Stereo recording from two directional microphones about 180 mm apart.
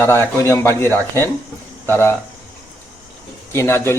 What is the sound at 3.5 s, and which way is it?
Speech, 15° left (ahead or behind).